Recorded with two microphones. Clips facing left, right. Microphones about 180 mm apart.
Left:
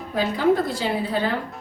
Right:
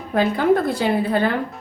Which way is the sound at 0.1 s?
55° right (ahead or behind).